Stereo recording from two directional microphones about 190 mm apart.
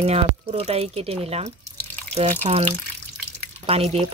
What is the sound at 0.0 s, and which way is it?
A woman's voice, 30° right (ahead or behind).